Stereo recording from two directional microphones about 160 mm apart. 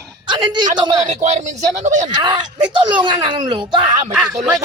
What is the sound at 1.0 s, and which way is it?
Speech, 45° right (ahead or behind).